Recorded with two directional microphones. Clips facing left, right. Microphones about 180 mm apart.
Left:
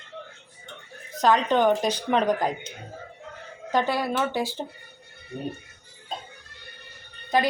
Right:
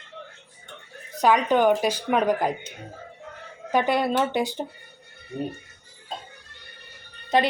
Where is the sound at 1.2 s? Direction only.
10° right (ahead or behind).